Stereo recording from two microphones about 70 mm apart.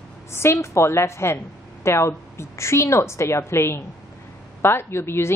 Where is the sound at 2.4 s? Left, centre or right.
Left.